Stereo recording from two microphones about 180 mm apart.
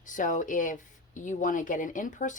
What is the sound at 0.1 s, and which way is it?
Speech, 45° left (ahead or behind).